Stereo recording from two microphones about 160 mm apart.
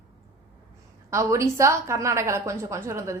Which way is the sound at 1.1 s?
20° right (ahead or behind).